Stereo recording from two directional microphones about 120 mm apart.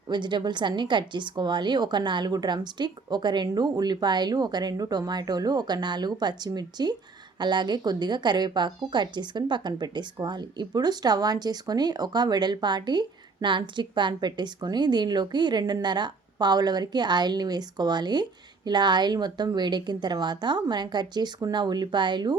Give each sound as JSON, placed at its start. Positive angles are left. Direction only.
{"t": 0.1, "sound": "a woman's voice", "side_deg": -40}